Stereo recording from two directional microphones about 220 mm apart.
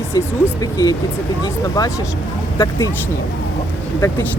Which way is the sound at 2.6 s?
15° left (ahead or behind).